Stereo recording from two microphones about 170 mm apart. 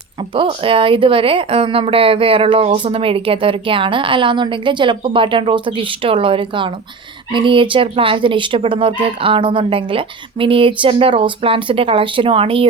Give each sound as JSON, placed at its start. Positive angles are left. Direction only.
{"t": 0.3, "sound": "a woman's voice", "side_deg": -30}